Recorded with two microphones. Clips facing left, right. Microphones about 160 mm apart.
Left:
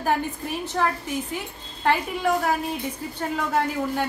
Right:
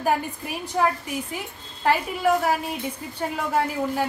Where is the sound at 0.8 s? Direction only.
10° right (ahead or behind).